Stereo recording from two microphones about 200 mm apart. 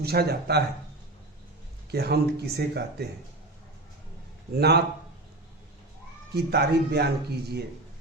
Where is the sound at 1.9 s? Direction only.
55° right (ahead or behind).